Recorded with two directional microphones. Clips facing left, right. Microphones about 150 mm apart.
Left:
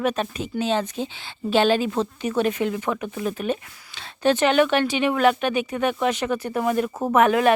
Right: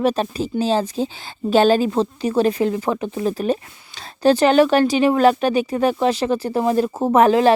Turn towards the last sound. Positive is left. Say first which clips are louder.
# right 4 dB
turn(degrees=-30)  # may be behind; listen again after turning